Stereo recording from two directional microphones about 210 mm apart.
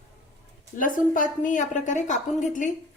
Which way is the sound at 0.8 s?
40° left (ahead or behind).